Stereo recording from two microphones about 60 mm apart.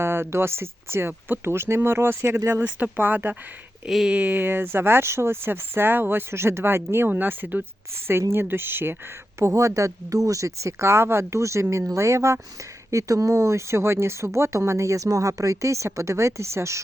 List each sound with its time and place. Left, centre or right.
0.0 s speech: right
3.8 s speech: centre
4.1 s speech: right
9.4 s speech: right
12.9 s speech: right